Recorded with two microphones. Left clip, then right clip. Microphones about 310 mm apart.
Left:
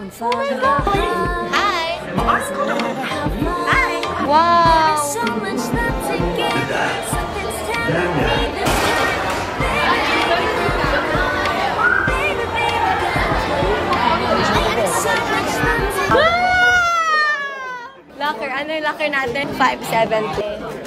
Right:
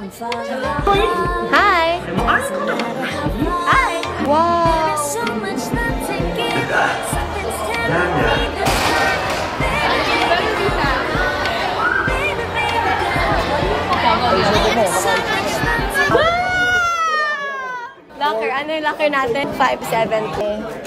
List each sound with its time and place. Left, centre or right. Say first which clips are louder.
0.7 s a woman's voice: right 2 dB; centre
1.5 s music: right 7 dB; right
3.6 s music: right 1 dB; centre
6.4 s music: right 4 dB; centre
7.9 s a woman's voice: right 2 dB; centre
10.1 s chatter: right 1 dB; centre
11.4 s music: left 1 dB; centre
13.8 s chatter: right 4 dB; centre
19.0 s a woman's voice: right 2 dB; centre